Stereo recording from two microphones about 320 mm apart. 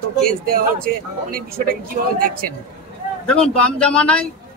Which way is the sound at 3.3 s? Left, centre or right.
Centre.